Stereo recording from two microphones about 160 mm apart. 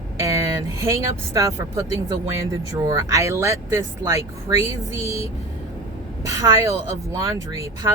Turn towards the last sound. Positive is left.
turn(degrees=-20)  # may be behind; listen again after turning